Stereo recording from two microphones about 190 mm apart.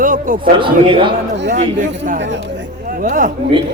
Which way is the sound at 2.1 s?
70° right (ahead or behind).